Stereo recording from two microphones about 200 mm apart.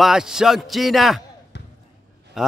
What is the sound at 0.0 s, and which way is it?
A man's voice, centre (ahead or behind).